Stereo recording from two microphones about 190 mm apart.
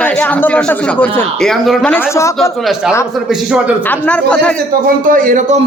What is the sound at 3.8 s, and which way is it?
Speech, 10° left (ahead or behind).